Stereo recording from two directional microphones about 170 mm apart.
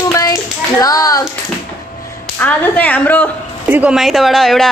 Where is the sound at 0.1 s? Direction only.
20° left (ahead or behind).